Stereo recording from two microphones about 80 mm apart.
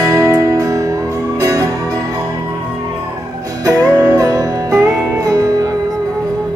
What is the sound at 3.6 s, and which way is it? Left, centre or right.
Music, right.